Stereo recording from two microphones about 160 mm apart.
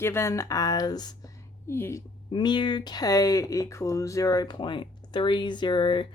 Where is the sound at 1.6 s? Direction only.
15° left (ahead or behind).